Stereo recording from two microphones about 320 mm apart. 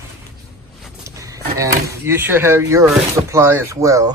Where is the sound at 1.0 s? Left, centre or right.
Centre.